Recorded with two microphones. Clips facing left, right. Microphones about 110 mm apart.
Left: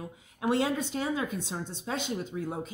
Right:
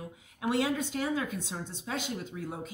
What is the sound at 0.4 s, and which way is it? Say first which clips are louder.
Speech: left 2 dB; 30° left (ahead or behind).